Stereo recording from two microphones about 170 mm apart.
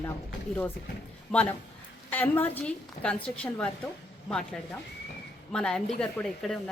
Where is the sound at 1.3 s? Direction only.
5° left (ahead or behind).